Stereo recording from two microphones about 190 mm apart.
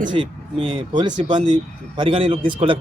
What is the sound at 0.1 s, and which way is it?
A man's voice, 30° right (ahead or behind).